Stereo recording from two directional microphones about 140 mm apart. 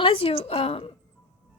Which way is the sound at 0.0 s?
40° left (ahead or behind).